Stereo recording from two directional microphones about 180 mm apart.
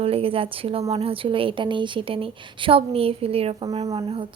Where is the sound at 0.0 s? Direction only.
30° right (ahead or behind).